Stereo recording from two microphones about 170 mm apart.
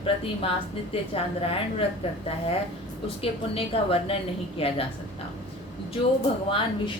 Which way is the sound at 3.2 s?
35° left (ahead or behind).